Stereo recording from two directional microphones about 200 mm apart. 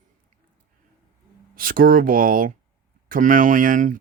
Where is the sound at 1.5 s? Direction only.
45° right (ahead or behind).